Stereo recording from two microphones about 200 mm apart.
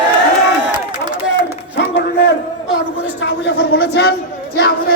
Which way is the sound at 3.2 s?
60° left (ahead or behind).